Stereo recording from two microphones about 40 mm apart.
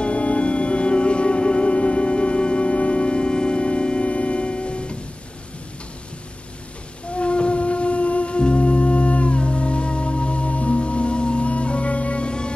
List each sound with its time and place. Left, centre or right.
0.0 s music: left
7.1 s music: left